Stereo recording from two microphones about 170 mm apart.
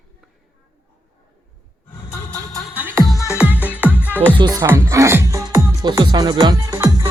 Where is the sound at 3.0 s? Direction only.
20° left (ahead or behind).